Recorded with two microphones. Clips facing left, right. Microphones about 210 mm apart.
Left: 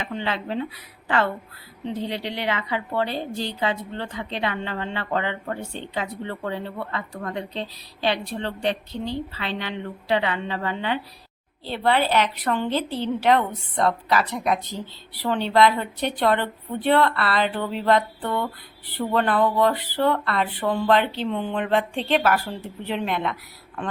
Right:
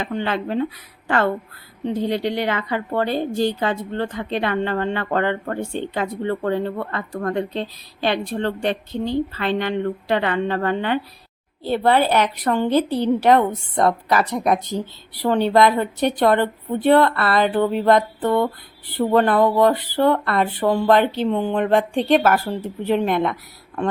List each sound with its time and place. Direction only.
0.0 s a woman's voice: 50° right (ahead or behind)